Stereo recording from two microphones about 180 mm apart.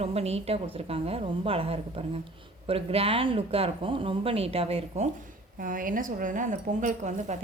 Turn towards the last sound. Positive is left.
turn(degrees=-40)  # may be behind; listen again after turning